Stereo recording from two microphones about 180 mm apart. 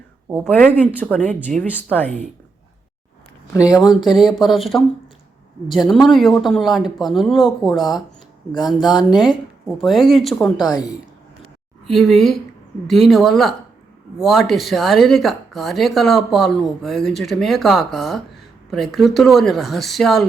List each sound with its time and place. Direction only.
0.3 s speech: 10° right (ahead or behind)
0.5 s speech: 10° left (ahead or behind)
4.0 s speech: centre (ahead or behind)
10.7 s a woman's voice: 20° left (ahead or behind)
11.9 s speech: centre (ahead or behind)